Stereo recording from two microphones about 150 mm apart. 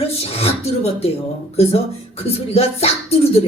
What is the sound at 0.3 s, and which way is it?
Speech, 45° left (ahead or behind).